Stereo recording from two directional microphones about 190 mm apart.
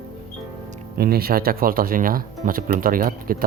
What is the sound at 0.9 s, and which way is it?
Speech, 55° right (ahead or behind).